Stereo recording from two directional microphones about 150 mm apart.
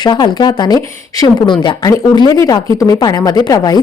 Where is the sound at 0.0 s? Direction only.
30° left (ahead or behind).